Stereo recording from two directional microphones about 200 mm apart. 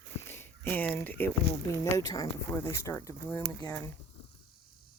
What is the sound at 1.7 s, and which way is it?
Speech, 15° left (ahead or behind).